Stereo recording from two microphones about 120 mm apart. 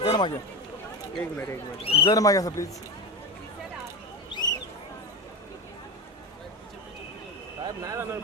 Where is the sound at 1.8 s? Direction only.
50° left (ahead or behind).